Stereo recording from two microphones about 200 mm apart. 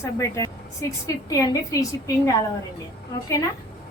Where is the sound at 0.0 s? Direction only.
15° left (ahead or behind).